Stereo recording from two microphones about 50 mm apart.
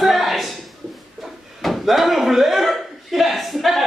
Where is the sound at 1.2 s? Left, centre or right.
Centre.